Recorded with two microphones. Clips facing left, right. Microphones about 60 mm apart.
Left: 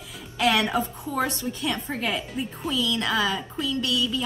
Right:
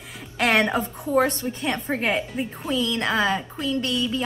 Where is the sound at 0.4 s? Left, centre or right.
Right.